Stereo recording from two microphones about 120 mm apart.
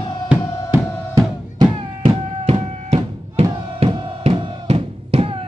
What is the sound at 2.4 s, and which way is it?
Music, 55° right (ahead or behind).